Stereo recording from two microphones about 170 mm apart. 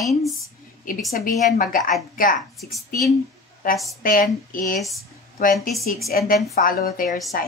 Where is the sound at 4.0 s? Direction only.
55° left (ahead or behind).